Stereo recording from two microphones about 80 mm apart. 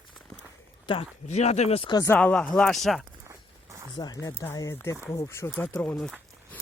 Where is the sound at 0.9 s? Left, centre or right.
Left.